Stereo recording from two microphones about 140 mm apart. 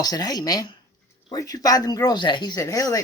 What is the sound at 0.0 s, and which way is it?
Speech, 30° left (ahead or behind).